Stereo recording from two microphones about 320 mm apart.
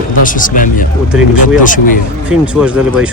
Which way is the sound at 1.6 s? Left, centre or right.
Left.